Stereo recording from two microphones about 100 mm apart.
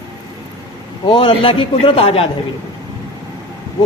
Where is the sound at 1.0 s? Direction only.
60° left (ahead or behind).